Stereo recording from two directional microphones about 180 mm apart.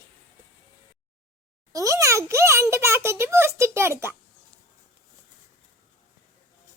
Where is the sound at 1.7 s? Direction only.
20° right (ahead or behind).